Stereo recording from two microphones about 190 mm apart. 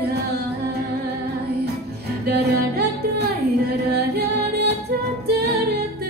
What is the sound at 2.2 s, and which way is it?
Music, 55° right (ahead or behind).